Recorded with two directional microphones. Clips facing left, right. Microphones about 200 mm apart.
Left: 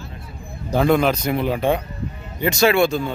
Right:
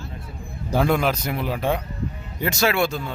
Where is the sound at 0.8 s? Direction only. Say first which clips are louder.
Left 4 dB; 5° right (ahead or behind).